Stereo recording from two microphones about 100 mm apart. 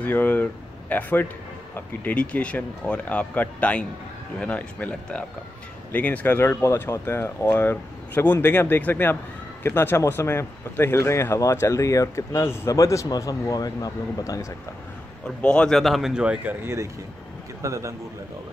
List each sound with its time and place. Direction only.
0.0 s speech: 20° left (ahead or behind); by 14.5 s 35° left (ahead or behind)
15.2 s speech: 10° left (ahead or behind); by 16.5 s 10° right (ahead or behind)
16.6 s speech: 30° right (ahead or behind)